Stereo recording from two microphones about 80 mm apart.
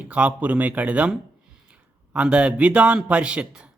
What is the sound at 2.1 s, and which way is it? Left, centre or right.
A man's voice, centre.